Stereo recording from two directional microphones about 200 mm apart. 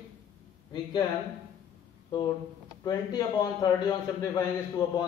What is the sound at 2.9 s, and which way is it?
A man's voice, 20° left (ahead or behind).